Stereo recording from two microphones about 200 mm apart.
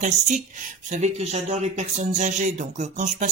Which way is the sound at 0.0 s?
40° right (ahead or behind).